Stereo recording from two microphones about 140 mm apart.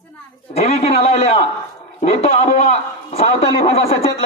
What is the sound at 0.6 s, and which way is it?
Speech, 50° left (ahead or behind).